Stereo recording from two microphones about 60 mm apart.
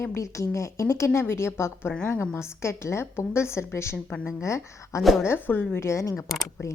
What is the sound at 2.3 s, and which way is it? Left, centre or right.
A woman's voice, left.